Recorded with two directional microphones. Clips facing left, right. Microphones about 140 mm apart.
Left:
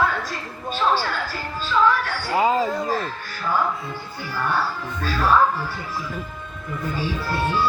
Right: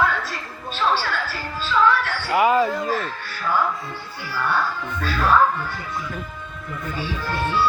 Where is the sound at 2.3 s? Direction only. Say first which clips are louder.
Right 2 dB; 25° left (ahead or behind).